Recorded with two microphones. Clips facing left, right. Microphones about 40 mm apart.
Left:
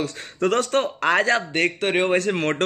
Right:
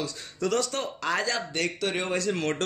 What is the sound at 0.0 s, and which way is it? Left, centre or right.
Speech, left.